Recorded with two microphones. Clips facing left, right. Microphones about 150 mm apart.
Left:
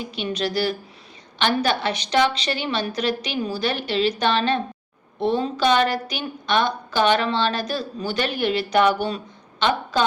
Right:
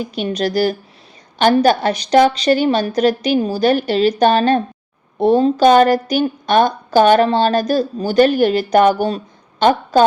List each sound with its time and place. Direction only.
0.0 s a woman's voice: 45° right (ahead or behind)